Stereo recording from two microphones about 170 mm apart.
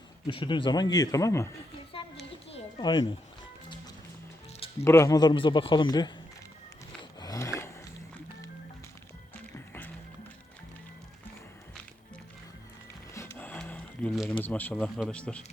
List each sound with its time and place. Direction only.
0.3 s a man's voice: 30° left (ahead or behind)
2.5 s music: 30° left (ahead or behind)
4.8 s a man's voice: 15° left (ahead or behind)
7.2 s a sound: 20° left (ahead or behind)
13.1 s a sound: 15° left (ahead or behind)
14.4 s speech: 10° left (ahead or behind)